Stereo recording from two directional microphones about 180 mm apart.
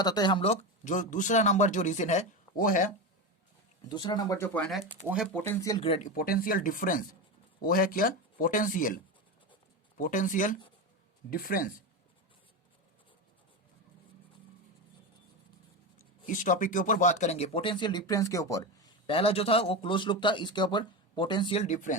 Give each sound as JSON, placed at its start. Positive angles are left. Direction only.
{"t": 0.0, "sound": "speech", "side_deg": 20}
{"t": 3.8, "sound": "speech", "side_deg": 25}
{"t": 5.3, "sound": "speech", "side_deg": 15}
{"t": 5.8, "sound": "speech", "side_deg": 30}
{"t": 6.1, "sound": "speech", "side_deg": 55}
{"t": 10.0, "sound": "speech", "side_deg": 45}
{"t": 16.2, "sound": "speech", "side_deg": 45}
{"t": 19.0, "sound": "a man's voice", "side_deg": 30}
{"t": 21.6, "sound": "speech", "side_deg": 45}